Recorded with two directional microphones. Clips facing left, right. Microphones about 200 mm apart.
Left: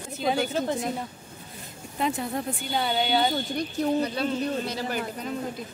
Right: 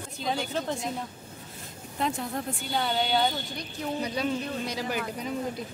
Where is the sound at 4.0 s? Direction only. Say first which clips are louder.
Left 3 dB; 10° right (ahead or behind).